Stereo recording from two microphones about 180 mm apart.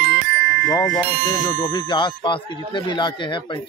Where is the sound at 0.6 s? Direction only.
20° left (ahead or behind).